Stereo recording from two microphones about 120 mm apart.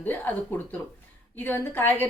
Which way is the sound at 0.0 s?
15° left (ahead or behind).